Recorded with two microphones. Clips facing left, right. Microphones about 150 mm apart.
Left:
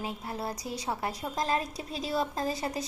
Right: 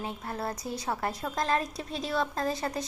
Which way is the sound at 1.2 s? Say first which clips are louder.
Right 1 dB; 30° left (ahead or behind).